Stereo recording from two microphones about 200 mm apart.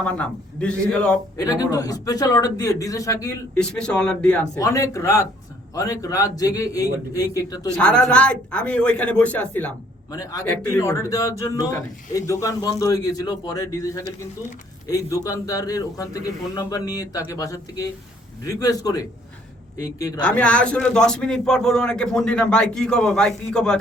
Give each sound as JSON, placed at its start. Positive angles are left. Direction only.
{"t": 0.0, "sound": "speech", "side_deg": 5}
{"t": 1.4, "sound": "a man's voice", "side_deg": 20}
{"t": 3.6, "sound": "speech", "side_deg": 5}
{"t": 4.5, "sound": "a man's voice", "side_deg": 15}
{"t": 7.8, "sound": "a man's voice", "side_deg": 5}
{"t": 20.2, "sound": "speech", "side_deg": 5}